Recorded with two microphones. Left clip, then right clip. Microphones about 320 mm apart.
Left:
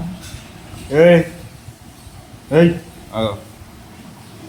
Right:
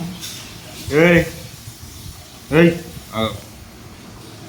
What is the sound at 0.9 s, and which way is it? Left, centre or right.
Speech, centre.